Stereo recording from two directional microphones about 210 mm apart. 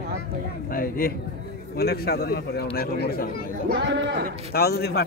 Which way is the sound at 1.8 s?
50° left (ahead or behind).